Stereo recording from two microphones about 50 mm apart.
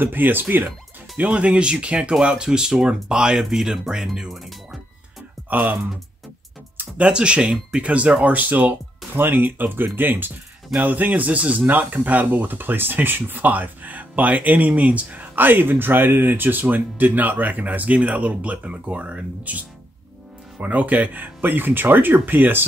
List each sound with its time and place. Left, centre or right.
0.0 s speech: right
1.1 s speech: right
5.5 s speech: right
7.0 s speech: right
11.6 s speech: right